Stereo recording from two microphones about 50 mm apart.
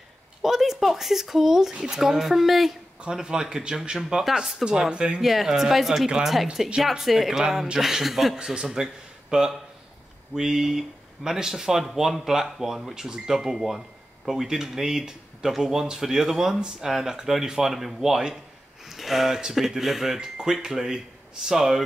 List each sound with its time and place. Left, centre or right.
0.4 s speech: centre
3.0 s speech: centre
4.6 s speech: centre
5.2 s speech: centre
20.2 s speech: centre